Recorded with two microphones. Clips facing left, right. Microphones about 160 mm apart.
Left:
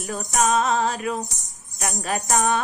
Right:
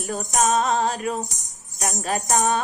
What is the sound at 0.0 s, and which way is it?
Music, 40° right (ahead or behind).